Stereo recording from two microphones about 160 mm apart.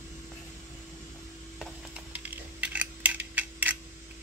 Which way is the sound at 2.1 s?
10° right (ahead or behind).